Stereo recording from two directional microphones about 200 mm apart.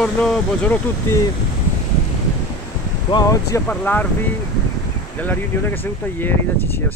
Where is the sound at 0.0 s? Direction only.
5° left (ahead or behind).